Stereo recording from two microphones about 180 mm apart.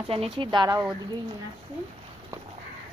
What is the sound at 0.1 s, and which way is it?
Speech, 30° right (ahead or behind).